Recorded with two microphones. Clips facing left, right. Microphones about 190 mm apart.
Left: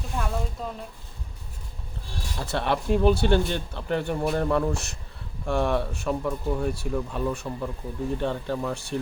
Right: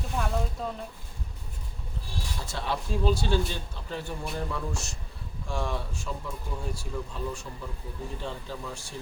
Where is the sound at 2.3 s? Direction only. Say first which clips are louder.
Left 7 dB; 65° left (ahead or behind).